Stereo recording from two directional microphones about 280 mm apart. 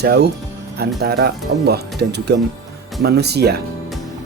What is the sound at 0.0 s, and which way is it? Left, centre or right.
Speech, right.